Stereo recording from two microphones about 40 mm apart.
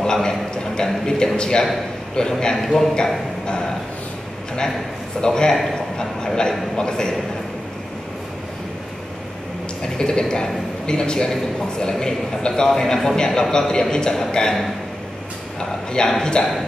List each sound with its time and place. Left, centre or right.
0.0 s a man's voice: centre
5.2 s a man's voice: centre
5.5 s a man's voice: centre
5.9 s a man's voice: centre
9.9 s a man's voice: centre
15.9 s a man's voice: centre